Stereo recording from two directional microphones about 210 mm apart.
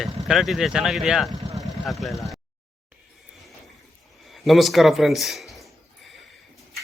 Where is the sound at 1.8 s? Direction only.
Centre (ahead or behind).